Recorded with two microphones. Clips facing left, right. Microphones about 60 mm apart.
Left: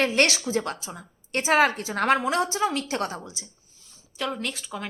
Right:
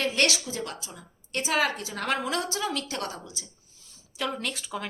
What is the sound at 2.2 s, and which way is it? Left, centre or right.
A woman's voice, left.